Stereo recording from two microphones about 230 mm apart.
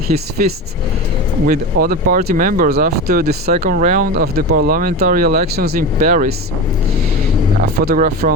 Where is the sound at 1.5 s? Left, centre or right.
Right.